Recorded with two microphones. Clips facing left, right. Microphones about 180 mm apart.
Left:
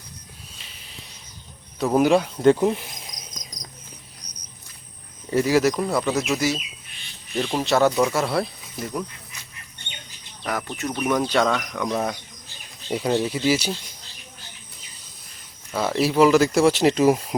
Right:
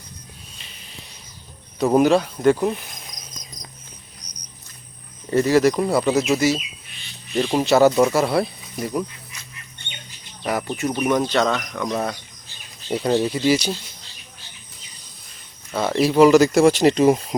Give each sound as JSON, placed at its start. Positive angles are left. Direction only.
{"t": 0.6, "sound": "a sound", "side_deg": 0}
{"t": 2.0, "sound": "speech", "side_deg": 15}
{"t": 5.3, "sound": "speech", "side_deg": 10}
{"t": 10.8, "sound": "speech", "side_deg": -10}
{"t": 11.3, "sound": "speech", "side_deg": 10}
{"t": 15.7, "sound": "speech", "side_deg": 5}